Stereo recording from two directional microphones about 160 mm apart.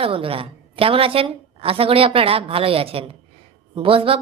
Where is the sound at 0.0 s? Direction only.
35° right (ahead or behind).